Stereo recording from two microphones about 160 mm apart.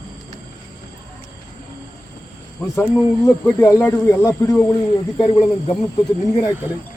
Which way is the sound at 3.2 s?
20° left (ahead or behind).